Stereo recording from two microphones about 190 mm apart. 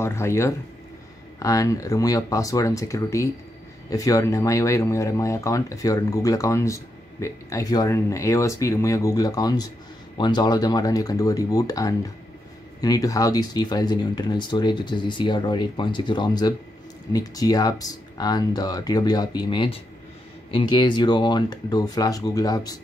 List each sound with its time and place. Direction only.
0.0 s speech: 15° left (ahead or behind)